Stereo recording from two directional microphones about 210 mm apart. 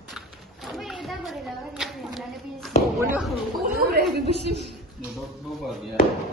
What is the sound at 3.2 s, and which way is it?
Speech, centre (ahead or behind).